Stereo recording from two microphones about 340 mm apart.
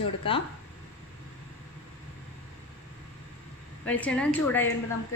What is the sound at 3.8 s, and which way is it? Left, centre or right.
Speech, centre.